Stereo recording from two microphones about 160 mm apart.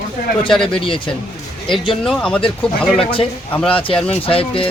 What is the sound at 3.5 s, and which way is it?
Speech, 5° left (ahead or behind).